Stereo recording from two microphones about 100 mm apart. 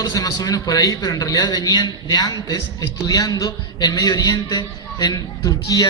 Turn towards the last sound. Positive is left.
turn(degrees=40)  # may be behind; listen again after turning